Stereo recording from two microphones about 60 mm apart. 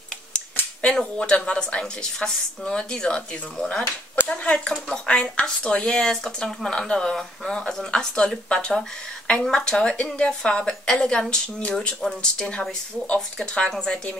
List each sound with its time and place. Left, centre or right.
0.8 s speech: centre